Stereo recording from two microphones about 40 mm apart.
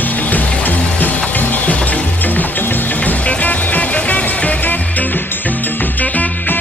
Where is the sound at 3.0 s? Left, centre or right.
Left.